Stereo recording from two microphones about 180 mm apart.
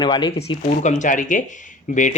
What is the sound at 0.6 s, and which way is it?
Speech, 40° left (ahead or behind).